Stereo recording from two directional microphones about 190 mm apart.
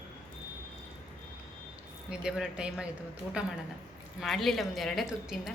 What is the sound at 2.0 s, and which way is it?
Speech, 5° right (ahead or behind).